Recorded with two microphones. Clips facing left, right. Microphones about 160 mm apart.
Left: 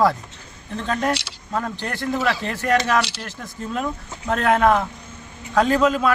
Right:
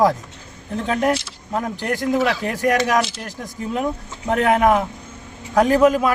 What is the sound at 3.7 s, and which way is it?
A man's voice, 15° right (ahead or behind).